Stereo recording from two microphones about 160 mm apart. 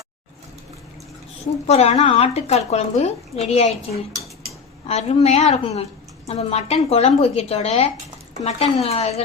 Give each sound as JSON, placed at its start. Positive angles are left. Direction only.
{"t": 1.6, "sound": "speech", "side_deg": 40}
{"t": 4.9, "sound": "speech", "side_deg": 40}